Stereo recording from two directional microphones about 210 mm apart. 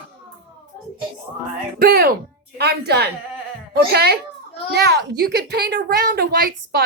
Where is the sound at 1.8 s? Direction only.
45° right (ahead or behind).